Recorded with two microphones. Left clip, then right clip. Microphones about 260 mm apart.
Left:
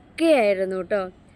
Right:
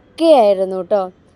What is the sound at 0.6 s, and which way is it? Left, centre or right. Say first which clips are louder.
Speech: right 7 dB; right.